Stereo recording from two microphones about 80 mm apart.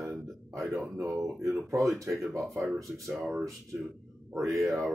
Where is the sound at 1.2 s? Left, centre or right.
Centre.